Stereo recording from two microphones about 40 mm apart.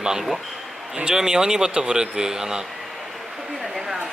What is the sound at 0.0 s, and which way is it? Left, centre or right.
Speech, centre.